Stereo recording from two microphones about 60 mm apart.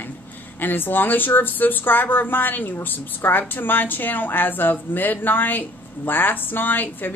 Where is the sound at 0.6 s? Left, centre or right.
Left.